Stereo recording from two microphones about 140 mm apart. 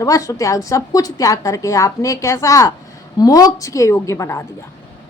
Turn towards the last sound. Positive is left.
turn(degrees=20)  # may be behind; listen again after turning